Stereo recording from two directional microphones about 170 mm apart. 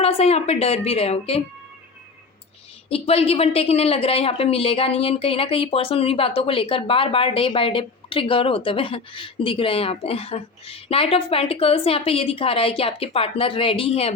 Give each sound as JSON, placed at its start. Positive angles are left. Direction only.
{"t": 0.0, "sound": "a woman's voice", "side_deg": 35}
{"t": 2.9, "sound": "a woman's voice", "side_deg": 35}